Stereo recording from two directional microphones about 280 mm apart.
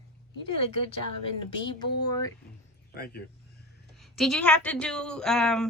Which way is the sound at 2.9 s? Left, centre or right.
Left.